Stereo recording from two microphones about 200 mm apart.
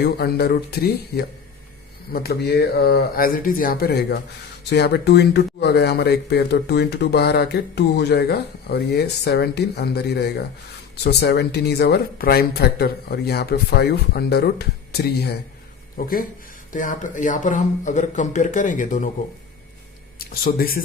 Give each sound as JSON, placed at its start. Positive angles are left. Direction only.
{"t": 0.0, "sound": "speech", "side_deg": 50}
{"t": 20.1, "sound": "speech", "side_deg": 50}